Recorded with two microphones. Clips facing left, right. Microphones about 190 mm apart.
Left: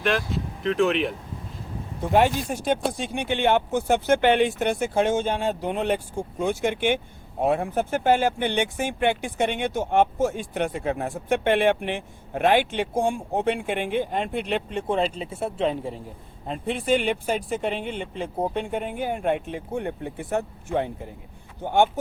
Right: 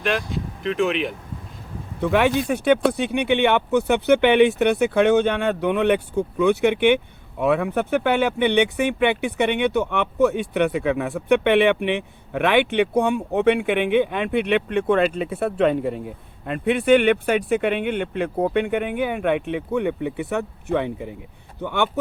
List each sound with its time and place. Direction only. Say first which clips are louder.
0.0 s speech: right 1 dB; centre (ahead or behind)
2.0 s speech: right 2 dB; 70° right (ahead or behind)